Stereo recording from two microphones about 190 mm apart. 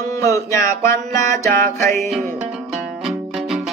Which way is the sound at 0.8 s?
15° left (ahead or behind).